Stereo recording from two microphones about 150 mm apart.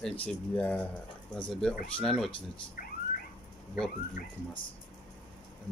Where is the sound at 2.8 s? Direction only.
65° left (ahead or behind).